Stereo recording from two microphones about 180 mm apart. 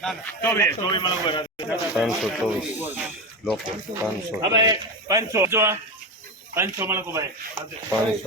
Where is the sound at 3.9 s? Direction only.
15° right (ahead or behind).